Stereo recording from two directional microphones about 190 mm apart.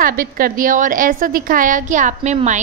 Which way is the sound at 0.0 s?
50° right (ahead or behind).